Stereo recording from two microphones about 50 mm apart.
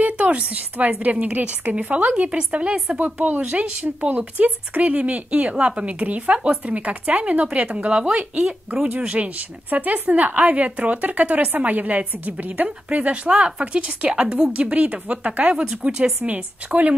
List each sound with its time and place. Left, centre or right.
0.0 s a woman's voice: right
9.1 s a woman's voice: right
16.2 s a woman's voice: right